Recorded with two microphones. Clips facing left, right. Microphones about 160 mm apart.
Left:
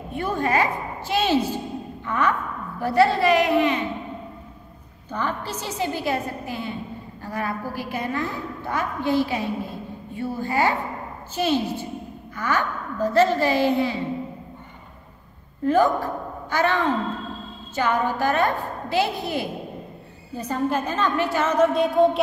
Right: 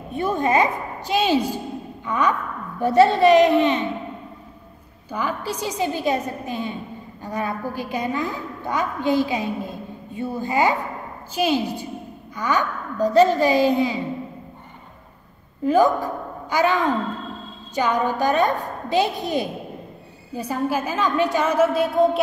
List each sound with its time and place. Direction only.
0.2 s a woman's voice: 20° right (ahead or behind)
5.1 s a woman's voice: 10° right (ahead or behind)
15.6 s a woman's voice: 15° right (ahead or behind)